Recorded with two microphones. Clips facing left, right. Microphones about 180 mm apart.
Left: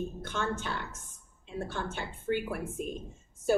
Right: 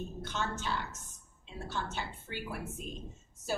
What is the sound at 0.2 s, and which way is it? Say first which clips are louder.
A woman's voice: left 3 dB; 55° left (ahead or behind).